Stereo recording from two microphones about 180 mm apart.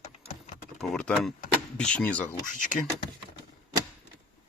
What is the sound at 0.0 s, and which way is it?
Typing, 35° left (ahead or behind).